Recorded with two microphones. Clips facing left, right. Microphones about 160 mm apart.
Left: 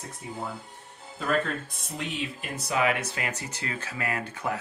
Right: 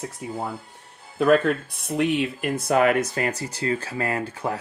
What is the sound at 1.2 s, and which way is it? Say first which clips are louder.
Speech: right 9 dB; 70° right (ahead or behind).